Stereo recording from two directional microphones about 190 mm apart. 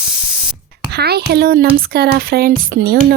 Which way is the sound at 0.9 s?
55° right (ahead or behind).